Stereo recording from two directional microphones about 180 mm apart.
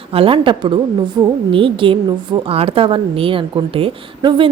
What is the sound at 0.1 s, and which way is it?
A woman's voice, 30° right (ahead or behind).